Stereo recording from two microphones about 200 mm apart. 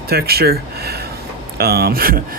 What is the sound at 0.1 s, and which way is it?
Speech, 50° right (ahead or behind).